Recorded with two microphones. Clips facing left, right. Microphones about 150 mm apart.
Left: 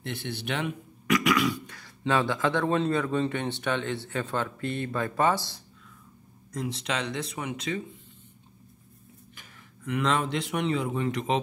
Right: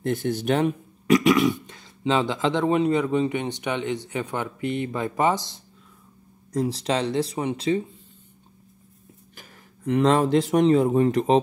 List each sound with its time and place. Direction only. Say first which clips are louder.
0.0 s speech: right 10 dB; 45° right (ahead or behind); by 5.6 s 20° right (ahead or behind)
6.5 s speech: right 7 dB; 35° right (ahead or behind)
9.3 s speech: right 3 dB; 35° right (ahead or behind)